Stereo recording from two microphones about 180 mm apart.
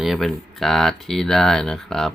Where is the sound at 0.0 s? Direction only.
Centre (ahead or behind).